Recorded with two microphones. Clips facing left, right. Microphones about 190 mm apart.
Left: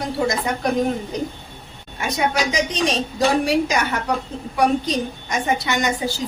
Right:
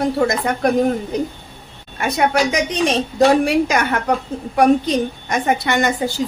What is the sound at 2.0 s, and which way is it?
Speech, 60° right (ahead or behind).